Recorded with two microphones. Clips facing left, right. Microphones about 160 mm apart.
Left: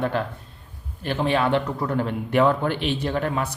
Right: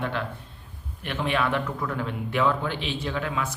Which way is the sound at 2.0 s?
45° left (ahead or behind).